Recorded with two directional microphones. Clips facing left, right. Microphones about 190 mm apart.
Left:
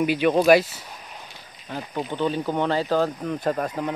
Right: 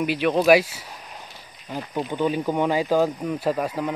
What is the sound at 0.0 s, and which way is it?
Speech, centre (ahead or behind).